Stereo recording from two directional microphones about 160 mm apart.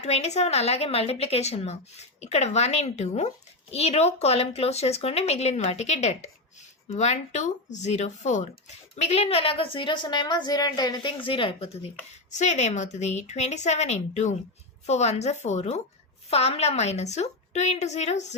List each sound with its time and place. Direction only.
0.0 s a woman's voice: 45° left (ahead or behind)